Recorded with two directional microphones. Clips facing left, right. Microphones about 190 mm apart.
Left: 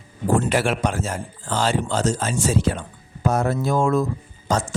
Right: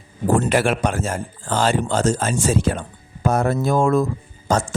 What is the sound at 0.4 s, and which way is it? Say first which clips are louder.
Speech: right 2 dB; 55° right (ahead or behind).